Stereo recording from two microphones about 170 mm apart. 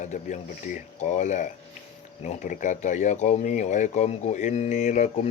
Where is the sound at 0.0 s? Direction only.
45° left (ahead or behind).